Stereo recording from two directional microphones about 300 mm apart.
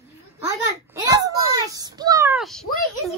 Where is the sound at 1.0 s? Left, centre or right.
Centre.